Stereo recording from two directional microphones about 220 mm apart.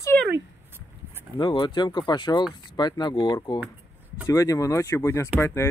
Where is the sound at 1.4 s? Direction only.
20° left (ahead or behind).